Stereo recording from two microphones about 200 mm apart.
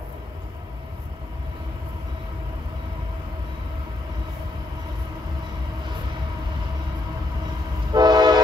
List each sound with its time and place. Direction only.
7.9 s train: 20° right (ahead or behind)